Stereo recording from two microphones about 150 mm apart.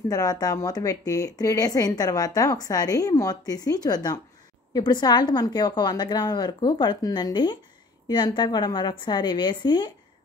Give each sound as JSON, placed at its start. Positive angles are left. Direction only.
{"t": 0.1, "sound": "a woman's voice", "side_deg": 25}